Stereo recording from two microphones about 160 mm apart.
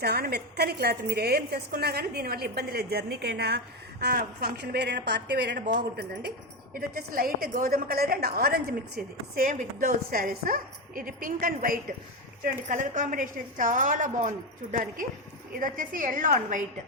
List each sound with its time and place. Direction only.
0.0 s a woman's voice: 75° right (ahead or behind)
4.0 s a woman's voice: 75° right (ahead or behind); by 5.7 s 90° right
6.7 s a woman's voice: 65° right (ahead or behind)
9.0 s a woman's voice: 65° right (ahead or behind)